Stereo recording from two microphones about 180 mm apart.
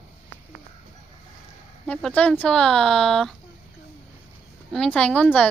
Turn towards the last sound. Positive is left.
turn(degrees=5)  # may be behind; listen again after turning